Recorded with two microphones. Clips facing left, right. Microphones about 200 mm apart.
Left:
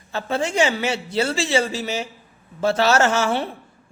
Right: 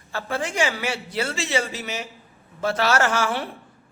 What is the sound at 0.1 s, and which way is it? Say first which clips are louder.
Speech: left 4 dB; 25° left (ahead or behind).